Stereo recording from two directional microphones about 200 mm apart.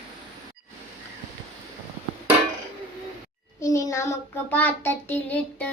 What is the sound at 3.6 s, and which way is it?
Child singing, 15° left (ahead or behind).